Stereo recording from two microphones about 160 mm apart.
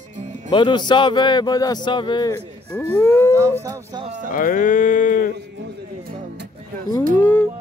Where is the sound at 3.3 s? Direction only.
20° right (ahead or behind).